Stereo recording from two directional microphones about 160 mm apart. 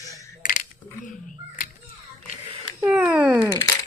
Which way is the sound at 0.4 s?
55° left (ahead or behind).